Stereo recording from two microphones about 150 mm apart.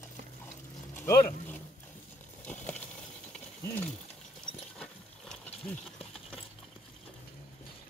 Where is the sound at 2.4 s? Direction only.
10° left (ahead or behind).